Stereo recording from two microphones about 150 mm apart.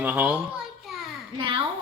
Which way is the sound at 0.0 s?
10° right (ahead or behind).